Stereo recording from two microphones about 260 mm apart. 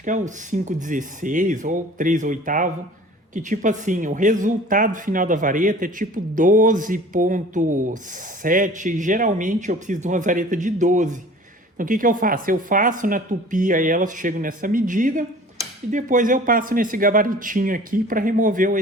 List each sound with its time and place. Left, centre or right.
0.0 s speech: right